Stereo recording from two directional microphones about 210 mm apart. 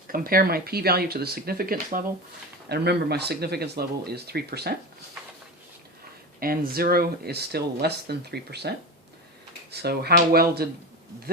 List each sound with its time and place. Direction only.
0.1 s speech: 45° right (ahead or behind)
6.4 s speech: 45° right (ahead or behind)
9.7 s speech: 50° right (ahead or behind)